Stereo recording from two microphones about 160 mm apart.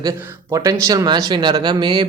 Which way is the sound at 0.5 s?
20° right (ahead or behind).